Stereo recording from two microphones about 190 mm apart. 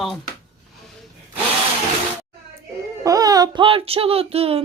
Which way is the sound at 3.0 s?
20° right (ahead or behind).